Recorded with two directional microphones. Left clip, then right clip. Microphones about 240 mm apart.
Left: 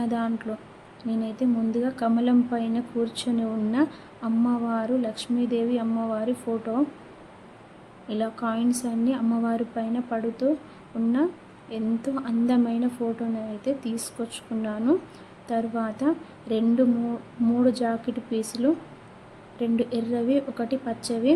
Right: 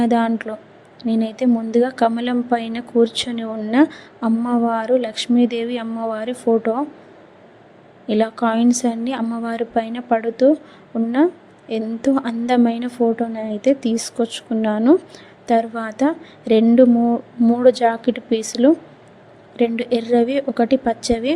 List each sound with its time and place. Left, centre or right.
0.0 s a woman's voice: right
8.0 s a woman's voice: right
11.7 s a woman's voice: right